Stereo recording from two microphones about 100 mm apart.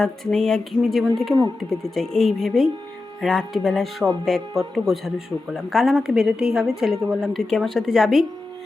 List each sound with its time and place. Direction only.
0.0 s speech: 5° left (ahead or behind)